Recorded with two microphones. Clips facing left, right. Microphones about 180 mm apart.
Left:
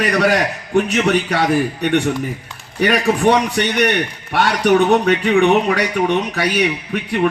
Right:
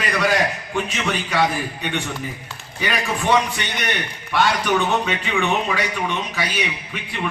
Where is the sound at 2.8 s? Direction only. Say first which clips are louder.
Left 9 dB; 60° left (ahead or behind).